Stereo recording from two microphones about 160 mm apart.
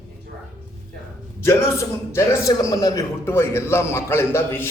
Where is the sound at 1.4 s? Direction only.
15° left (ahead or behind).